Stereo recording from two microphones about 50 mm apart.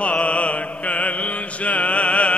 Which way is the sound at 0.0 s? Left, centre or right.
Left.